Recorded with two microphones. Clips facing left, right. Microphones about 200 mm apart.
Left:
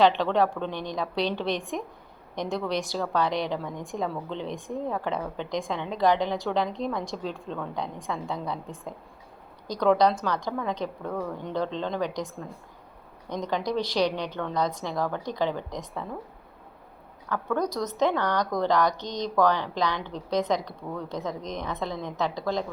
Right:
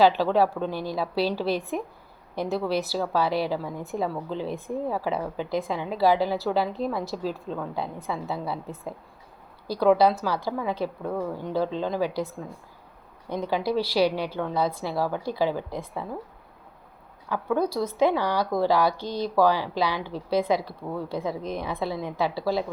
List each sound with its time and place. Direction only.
0.0 s a woman's voice: 5° right (ahead or behind)
17.2 s speech: 10° right (ahead or behind)